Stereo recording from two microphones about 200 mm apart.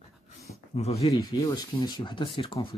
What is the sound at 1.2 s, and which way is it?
Speech, 15° left (ahead or behind).